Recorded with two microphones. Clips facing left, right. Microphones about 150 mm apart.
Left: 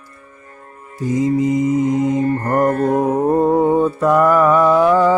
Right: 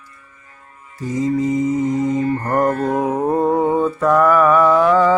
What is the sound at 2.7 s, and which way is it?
Music, 50° left (ahead or behind).